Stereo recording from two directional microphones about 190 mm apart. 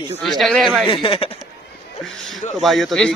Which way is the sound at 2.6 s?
Centre (ahead or behind).